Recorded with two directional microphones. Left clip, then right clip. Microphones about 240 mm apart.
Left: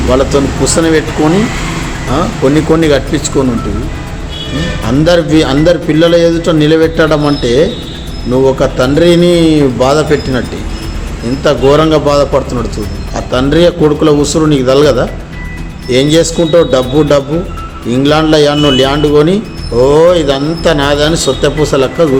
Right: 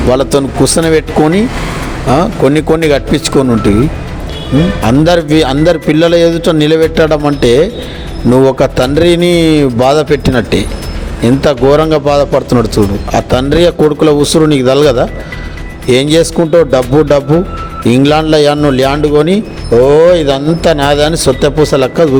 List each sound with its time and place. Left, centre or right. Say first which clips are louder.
0.1 s a man's voice: even; right
4.9 s a man's voice: left 1 dB; right